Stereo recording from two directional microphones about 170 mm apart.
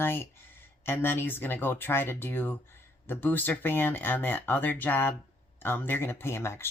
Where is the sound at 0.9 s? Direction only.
15° left (ahead or behind).